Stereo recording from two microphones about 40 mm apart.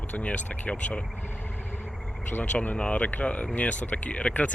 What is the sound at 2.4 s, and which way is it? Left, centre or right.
Speech, left.